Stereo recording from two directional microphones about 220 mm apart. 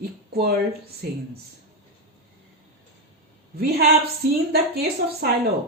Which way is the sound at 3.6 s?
45° right (ahead or behind).